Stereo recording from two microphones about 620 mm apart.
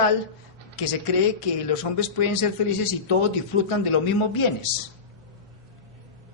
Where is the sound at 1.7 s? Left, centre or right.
Left.